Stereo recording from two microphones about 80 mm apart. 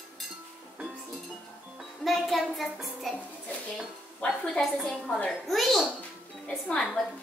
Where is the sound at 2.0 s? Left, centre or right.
Centre.